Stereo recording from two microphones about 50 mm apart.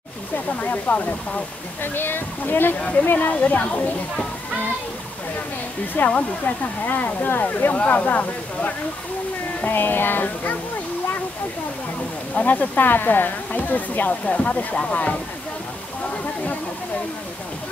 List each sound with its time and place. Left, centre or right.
0.6 s speech: left
1.8 s speech: left
2.8 s speech: left
3.1 s speech: left
3.3 s speech: left
5.9 s speech: left
6.8 s speech: left
9.6 s speech: left
12.4 s speech: left